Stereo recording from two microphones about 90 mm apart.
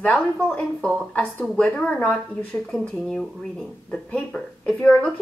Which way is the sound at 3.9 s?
15° left (ahead or behind).